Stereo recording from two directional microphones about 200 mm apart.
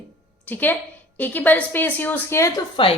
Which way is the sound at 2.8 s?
25° left (ahead or behind).